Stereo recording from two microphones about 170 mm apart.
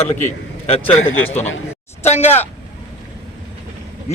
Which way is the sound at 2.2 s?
10° left (ahead or behind).